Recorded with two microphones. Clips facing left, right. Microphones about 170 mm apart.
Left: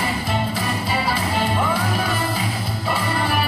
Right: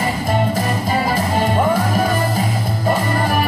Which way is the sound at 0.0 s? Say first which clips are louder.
Right 5 dB; 45° right (ahead or behind).